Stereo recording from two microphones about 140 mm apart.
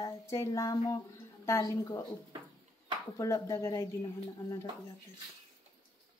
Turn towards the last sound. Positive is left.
turn(degrees=20)  # may be behind; listen again after turning